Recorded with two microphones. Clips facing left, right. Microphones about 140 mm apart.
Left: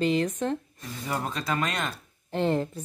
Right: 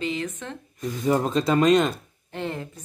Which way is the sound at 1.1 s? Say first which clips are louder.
Right 9 dB; 25° right (ahead or behind).